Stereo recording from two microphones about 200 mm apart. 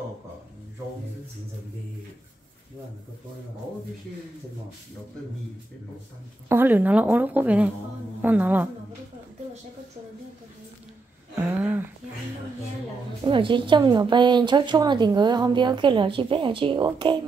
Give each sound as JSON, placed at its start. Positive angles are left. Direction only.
{"t": 6.5, "sound": "a woman's voice", "side_deg": -10}
{"t": 11.3, "sound": "a sound", "side_deg": -10}
{"t": 13.2, "sound": "a woman's voice", "side_deg": -25}